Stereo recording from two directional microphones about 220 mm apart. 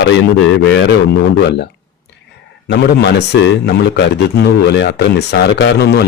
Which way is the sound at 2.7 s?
50° left (ahead or behind).